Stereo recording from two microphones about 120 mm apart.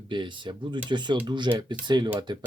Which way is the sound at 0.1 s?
40° right (ahead or behind).